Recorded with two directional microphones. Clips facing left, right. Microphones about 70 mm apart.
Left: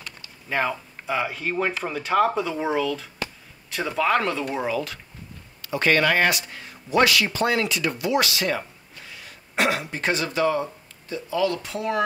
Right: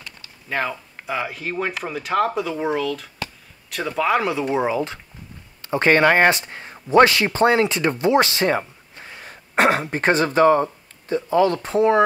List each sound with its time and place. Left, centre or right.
0.5 s speech: centre; by 12.0 s right